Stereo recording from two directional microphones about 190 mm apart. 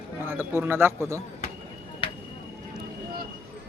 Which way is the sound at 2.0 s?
25° left (ahead or behind).